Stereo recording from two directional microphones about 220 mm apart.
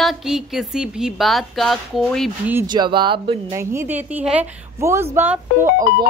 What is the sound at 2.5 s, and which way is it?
A woman's voice, 20° right (ahead or behind).